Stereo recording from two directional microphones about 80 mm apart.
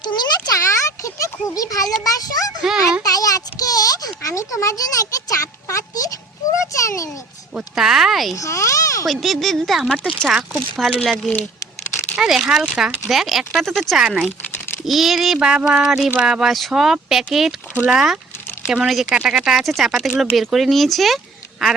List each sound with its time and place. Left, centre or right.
0.0 s a sound: left
0.5 s a sound: left
2.0 s a child's voice: left
2.6 s speech: centre
3.0 s a sound: left
6.7 s a child's voice: left
7.8 s speech: centre
8.4 s speech: left
9.0 s speech: centre
12.1 s speech: centre